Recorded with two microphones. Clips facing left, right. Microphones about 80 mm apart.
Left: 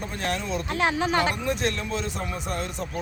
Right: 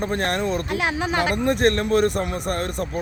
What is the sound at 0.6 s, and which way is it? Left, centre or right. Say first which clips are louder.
Speech: right 1 dB; centre.